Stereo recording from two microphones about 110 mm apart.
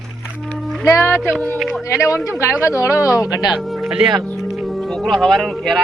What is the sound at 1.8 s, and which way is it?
Speech, 30° left (ahead or behind).